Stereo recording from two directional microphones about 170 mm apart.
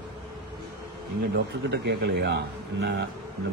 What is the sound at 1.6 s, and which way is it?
Speech, 85° right.